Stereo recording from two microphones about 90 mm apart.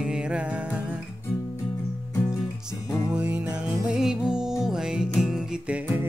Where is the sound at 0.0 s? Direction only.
10° right (ahead or behind).